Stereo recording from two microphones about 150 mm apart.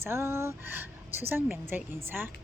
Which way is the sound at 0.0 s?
15° right (ahead or behind).